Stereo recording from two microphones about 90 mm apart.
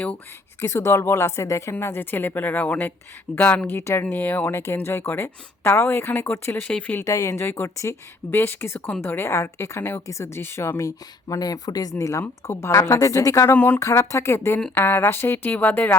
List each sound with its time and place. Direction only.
0.6 s a woman's voice: 30° left (ahead or behind)
7.0 s a woman's voice: 35° left (ahead or behind)
13.5 s a woman's voice: 20° left (ahead or behind)
13.7 s a woman's voice: 35° left (ahead or behind)